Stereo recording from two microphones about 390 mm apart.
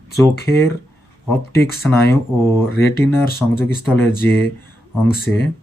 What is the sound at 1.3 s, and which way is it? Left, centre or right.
Speech, centre.